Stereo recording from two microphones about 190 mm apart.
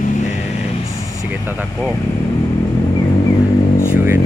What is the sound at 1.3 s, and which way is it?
Speech, 10° right (ahead or behind).